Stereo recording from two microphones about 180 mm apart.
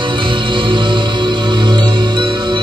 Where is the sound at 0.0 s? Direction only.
25° right (ahead or behind).